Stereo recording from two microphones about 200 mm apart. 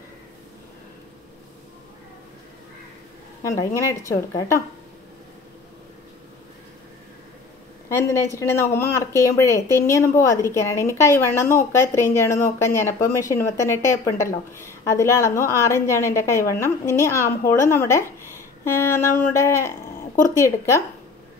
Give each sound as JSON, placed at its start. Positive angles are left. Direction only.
{"t": 3.4, "sound": "speech", "side_deg": 15}
{"t": 8.1, "sound": "speech", "side_deg": 15}